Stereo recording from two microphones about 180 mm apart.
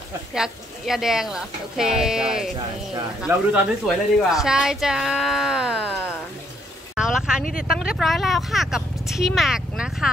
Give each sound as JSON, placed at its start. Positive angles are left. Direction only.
{"t": 0.3, "sound": "speech", "side_deg": 0}
{"t": 7.0, "sound": "a sound", "side_deg": -5}
{"t": 7.4, "sound": "speech", "side_deg": 50}
{"t": 7.7, "sound": "speech", "side_deg": -5}